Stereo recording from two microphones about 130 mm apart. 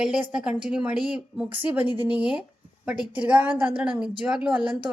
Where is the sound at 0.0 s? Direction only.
5° right (ahead or behind).